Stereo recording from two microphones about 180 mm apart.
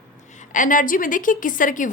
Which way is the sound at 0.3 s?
45° left (ahead or behind).